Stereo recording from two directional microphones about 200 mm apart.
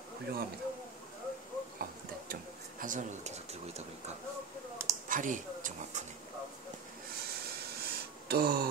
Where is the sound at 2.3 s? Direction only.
40° right (ahead or behind).